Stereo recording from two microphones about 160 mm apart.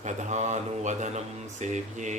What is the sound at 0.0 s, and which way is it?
Speech, 45° right (ahead or behind).